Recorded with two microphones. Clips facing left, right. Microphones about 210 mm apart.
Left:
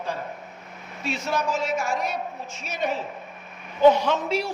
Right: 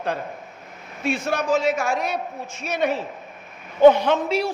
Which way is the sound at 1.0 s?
55° right (ahead or behind).